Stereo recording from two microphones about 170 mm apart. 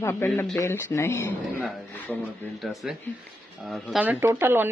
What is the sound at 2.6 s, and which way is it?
Speech, centre (ahead or behind).